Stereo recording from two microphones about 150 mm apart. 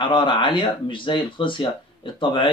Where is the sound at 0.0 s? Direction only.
35° left (ahead or behind).